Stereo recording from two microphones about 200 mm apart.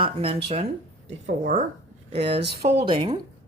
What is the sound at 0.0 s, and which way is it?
Speech, 25° right (ahead or behind).